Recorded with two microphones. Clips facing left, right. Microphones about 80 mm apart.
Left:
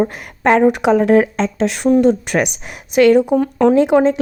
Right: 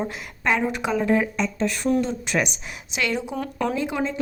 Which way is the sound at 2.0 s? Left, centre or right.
Left.